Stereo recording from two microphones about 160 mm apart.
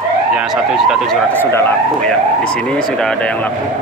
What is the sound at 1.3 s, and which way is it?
Speech, 15° left (ahead or behind).